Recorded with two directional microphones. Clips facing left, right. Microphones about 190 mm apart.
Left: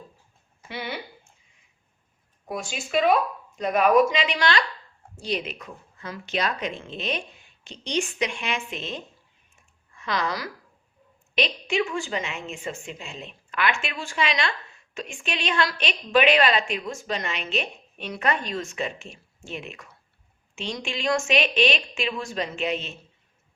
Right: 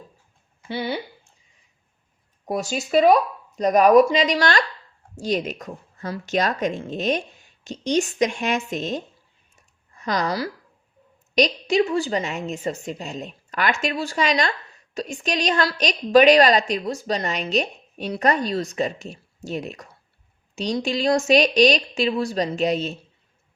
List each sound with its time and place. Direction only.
0.7 s a woman's voice: 30° right (ahead or behind)
2.5 s a woman's voice: 40° right (ahead or behind)